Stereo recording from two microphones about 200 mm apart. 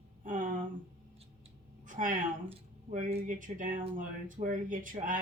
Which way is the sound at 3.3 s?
40° right (ahead or behind).